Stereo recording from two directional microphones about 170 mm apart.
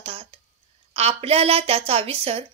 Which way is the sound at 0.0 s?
35° right (ahead or behind).